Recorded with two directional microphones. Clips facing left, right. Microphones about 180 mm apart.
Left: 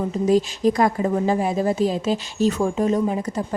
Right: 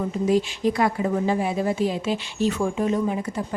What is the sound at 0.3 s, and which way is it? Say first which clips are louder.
A woman's voice: left 3 dB; 40° left (ahead or behind).